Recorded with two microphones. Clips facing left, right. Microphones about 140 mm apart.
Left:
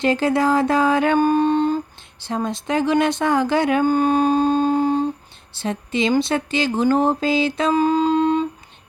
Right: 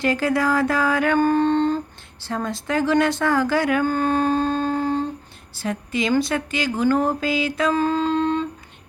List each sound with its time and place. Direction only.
0.0 s speech: 25° left (ahead or behind)
1.2 s mantra: 10° left (ahead or behind)
2.2 s speech: 20° left (ahead or behind)
5.5 s speech: 25° left (ahead or behind)
7.7 s a sound: 15° left (ahead or behind)